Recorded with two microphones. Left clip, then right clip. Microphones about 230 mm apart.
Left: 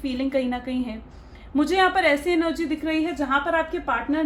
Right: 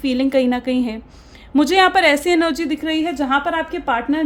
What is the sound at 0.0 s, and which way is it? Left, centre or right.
A woman's voice, right.